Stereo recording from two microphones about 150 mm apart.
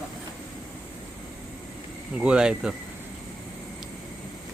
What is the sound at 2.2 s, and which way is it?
Speech, 5° right (ahead or behind).